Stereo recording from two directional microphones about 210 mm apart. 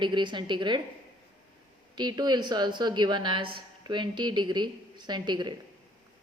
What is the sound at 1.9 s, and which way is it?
Speech, 20° right (ahead or behind).